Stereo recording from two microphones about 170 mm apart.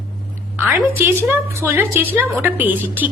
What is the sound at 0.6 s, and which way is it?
A woman's voice, 15° right (ahead or behind).